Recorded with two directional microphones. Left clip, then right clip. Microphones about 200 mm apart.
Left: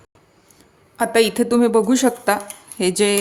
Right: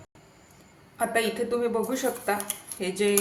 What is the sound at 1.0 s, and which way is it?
A woman's voice, 55° left (ahead or behind).